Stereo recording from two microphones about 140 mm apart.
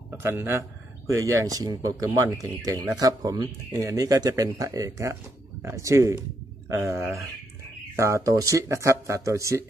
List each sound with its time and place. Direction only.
0.2 s speech: 20° right (ahead or behind)